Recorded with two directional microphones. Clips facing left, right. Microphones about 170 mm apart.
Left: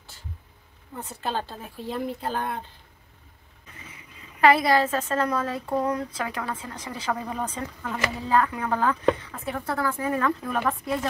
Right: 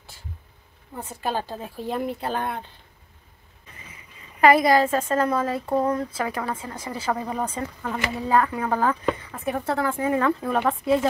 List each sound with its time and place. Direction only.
0.9 s a woman's voice: 15° right (ahead or behind)
1.9 s speech: 65° right (ahead or behind)
4.6 s a woman's voice: 10° right (ahead or behind); by 10.6 s 30° right (ahead or behind)